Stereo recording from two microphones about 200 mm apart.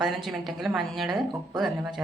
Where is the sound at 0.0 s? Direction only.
Centre (ahead or behind).